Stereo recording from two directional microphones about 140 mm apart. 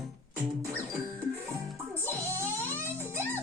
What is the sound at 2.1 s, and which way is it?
Music, 20° right (ahead or behind).